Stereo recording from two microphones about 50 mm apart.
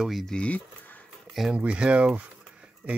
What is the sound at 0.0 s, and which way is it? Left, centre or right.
Speech, centre.